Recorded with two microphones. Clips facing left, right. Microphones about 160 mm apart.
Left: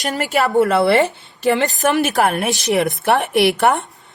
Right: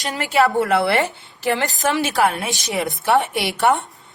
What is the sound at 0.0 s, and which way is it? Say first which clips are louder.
Speech: left 4 dB; 45° left (ahead or behind).